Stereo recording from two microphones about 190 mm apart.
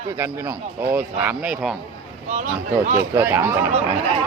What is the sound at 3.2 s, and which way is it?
Speech, 15° right (ahead or behind).